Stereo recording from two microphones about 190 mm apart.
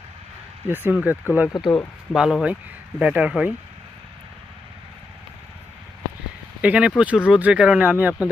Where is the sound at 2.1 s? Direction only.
5° right (ahead or behind).